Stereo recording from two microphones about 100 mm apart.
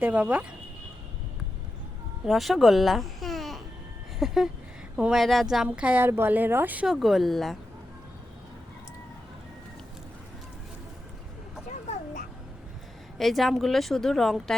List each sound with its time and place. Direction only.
0.0 s speech: 15° right (ahead or behind)
2.2 s a child's voice: centre (ahead or behind)
5.6 s speech: 15° right (ahead or behind)
6.8 s speech: 5° right (ahead or behind)
13.1 s speech: centre (ahead or behind)